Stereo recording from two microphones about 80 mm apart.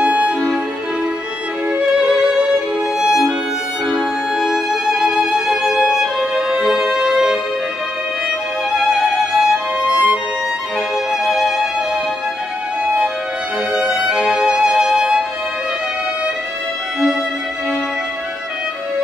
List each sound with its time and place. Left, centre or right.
0.0 s music: centre
2.0 s music: centre
8.7 s music: centre
9.8 s music: centre
11.2 s music: centre
12.8 s music: centre